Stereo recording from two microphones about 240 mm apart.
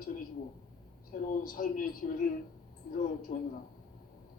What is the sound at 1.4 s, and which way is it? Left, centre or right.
Speech, left.